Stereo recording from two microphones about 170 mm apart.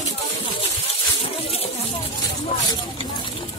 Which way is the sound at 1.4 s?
35° left (ahead or behind).